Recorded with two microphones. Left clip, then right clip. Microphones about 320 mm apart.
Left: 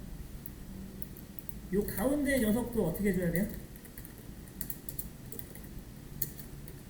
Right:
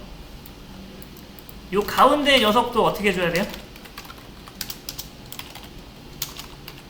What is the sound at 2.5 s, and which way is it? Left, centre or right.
Speech, right.